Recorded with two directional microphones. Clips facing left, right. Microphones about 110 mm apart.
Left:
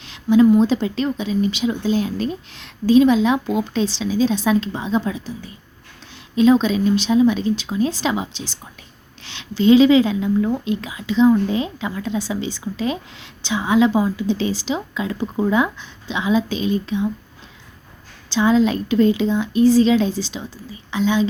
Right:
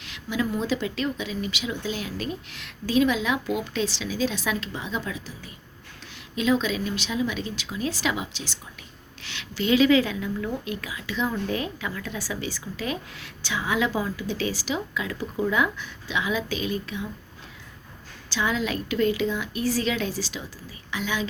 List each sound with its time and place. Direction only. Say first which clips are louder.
0.0 s speech: left 14 dB; 30° left (ahead or behind)
6.3 s speech: left 9 dB; 30° left (ahead or behind)
18.3 s speech: left 10 dB; 30° left (ahead or behind)